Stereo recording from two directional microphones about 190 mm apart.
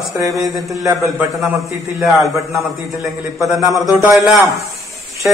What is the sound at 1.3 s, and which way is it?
Speech, centre (ahead or behind).